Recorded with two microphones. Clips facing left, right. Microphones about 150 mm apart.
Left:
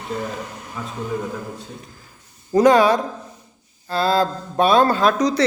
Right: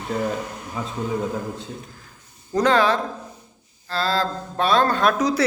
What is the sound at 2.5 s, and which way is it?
Speech, 10° left (ahead or behind).